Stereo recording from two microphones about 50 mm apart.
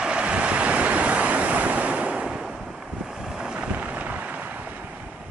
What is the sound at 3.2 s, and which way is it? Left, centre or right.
Boat, centre.